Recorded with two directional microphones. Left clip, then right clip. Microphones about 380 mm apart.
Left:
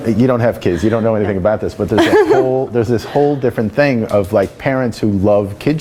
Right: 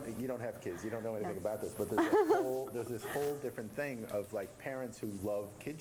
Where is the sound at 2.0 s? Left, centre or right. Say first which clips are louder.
Left 19 dB; centre.